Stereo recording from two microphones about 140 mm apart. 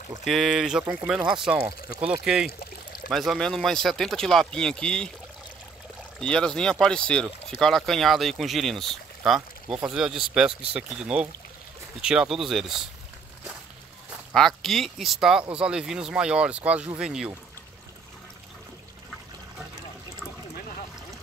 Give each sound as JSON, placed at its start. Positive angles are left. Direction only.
{"t": 0.2, "sound": "speech", "side_deg": 0}
{"t": 6.1, "sound": "speech", "side_deg": 5}
{"t": 14.3, "sound": "speech", "side_deg": 5}